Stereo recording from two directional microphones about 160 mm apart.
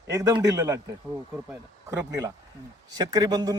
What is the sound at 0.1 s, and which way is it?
Speech, 20° right (ahead or behind).